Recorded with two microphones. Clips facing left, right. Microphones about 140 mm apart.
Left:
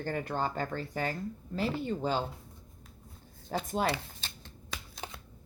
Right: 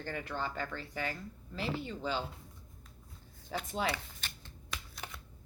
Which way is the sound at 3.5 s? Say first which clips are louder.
Left 4 dB; 45° left (ahead or behind).